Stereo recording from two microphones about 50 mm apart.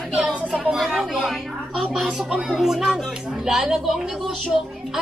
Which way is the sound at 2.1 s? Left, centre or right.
Centre.